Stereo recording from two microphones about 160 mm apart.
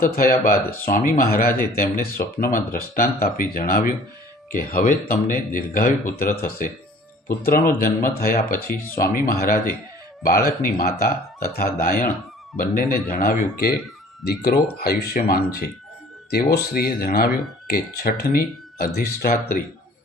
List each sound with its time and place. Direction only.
0.0 s speech: 65° left (ahead or behind)